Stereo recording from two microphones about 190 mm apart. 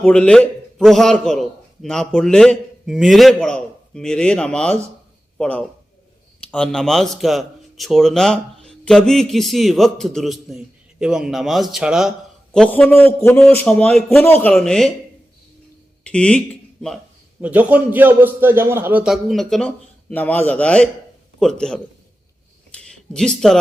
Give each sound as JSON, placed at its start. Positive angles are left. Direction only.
{"t": 0.0, "sound": "a man's voice", "side_deg": 5}
{"t": 16.0, "sound": "a man's voice", "side_deg": 5}
{"t": 17.4, "sound": "a man's voice", "side_deg": -10}
{"t": 22.9, "sound": "speech", "side_deg": 5}